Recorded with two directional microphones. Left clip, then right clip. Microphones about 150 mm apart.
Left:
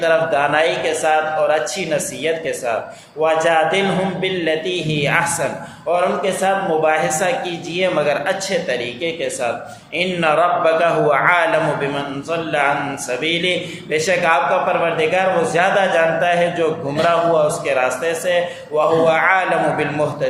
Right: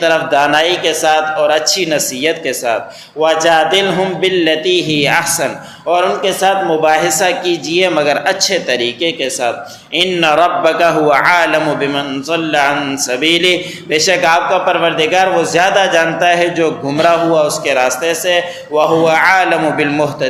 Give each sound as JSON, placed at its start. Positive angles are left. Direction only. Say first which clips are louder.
{"t": 0.0, "sound": "a man's voice", "louder": "right 4 dB", "side_deg": -35}